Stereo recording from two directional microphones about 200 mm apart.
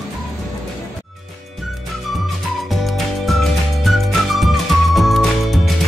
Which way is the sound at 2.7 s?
Centre (ahead or behind).